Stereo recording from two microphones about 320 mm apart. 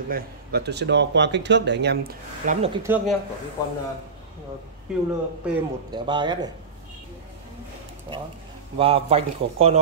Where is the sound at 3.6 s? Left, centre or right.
Centre.